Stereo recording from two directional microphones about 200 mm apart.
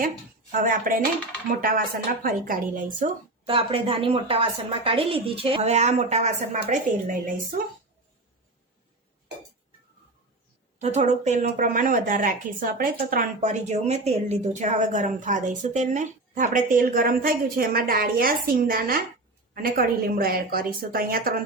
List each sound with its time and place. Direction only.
0.5 s a woman's voice: 45° right (ahead or behind)
2.2 s a woman's voice: 45° right (ahead or behind)
3.4 s a woman's voice: 25° right (ahead or behind); by 7.4 s 40° right (ahead or behind)
10.8 s a woman's voice: 35° right (ahead or behind)